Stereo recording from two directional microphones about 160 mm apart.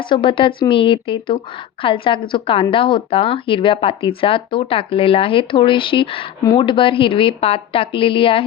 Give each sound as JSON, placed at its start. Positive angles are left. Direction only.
{"t": 0.0, "sound": "a woman's voice", "side_deg": 30}